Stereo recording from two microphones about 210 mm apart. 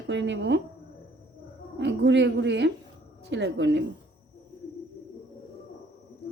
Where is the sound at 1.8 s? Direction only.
60° right (ahead or behind).